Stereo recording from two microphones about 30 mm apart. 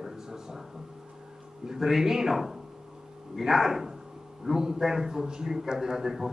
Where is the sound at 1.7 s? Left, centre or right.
Centre.